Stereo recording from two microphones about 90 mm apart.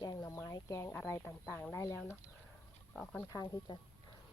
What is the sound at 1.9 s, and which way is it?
Speech, 25° left (ahead or behind).